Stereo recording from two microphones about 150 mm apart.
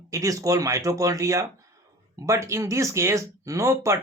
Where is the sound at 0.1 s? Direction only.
20° right (ahead or behind).